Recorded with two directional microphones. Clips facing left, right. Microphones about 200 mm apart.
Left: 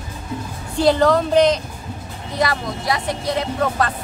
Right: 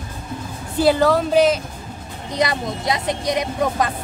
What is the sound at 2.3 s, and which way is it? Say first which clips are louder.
Speech: even; 20° right (ahead or behind).